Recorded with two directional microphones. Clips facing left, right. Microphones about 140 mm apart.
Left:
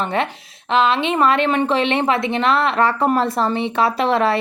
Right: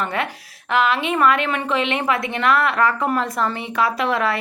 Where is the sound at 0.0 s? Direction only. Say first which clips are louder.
Left 3 dB; 25° left (ahead or behind).